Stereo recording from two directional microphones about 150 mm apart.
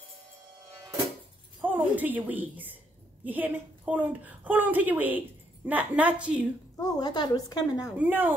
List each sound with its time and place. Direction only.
1.6 s a woman's voice: 10° right (ahead or behind)
6.8 s a woman's voice: 25° left (ahead or behind)
8.0 s a woman's voice: 10° right (ahead or behind)